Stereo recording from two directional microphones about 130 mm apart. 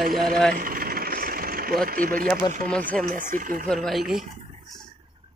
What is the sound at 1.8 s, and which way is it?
Speech, 90° right.